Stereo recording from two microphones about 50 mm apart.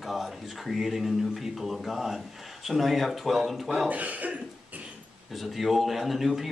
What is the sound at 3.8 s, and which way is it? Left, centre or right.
Speech, right.